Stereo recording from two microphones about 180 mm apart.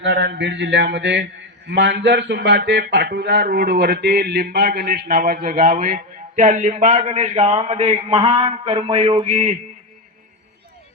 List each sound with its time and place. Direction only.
0.0 s a man's voice: 80° right; by 9.6 s 35° right (ahead or behind)